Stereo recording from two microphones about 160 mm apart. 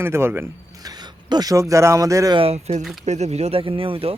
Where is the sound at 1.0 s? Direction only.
25° right (ahead or behind).